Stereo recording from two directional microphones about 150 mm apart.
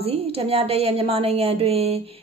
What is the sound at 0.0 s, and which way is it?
A woman's voice, 40° right (ahead or behind).